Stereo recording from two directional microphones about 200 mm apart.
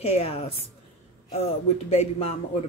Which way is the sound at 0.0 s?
30° left (ahead or behind).